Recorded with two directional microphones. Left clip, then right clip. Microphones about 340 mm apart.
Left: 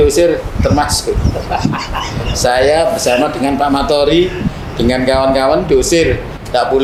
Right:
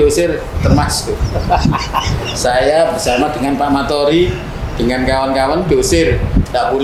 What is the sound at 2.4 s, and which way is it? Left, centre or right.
A man's voice, left.